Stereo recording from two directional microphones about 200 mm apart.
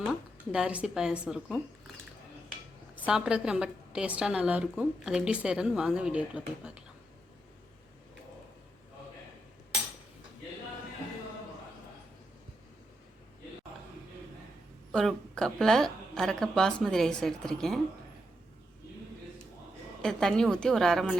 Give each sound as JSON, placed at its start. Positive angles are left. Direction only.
{"t": 0.5, "sound": "a woman's voice", "side_deg": -5}
{"t": 2.9, "sound": "a woman's voice", "side_deg": -5}
{"t": 14.9, "sound": "a woman's voice", "side_deg": 0}
{"t": 20.0, "sound": "a woman's voice", "side_deg": 5}